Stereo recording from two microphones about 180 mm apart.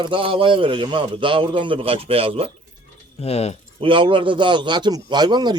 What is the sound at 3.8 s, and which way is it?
A man's voice, 30° right (ahead or behind).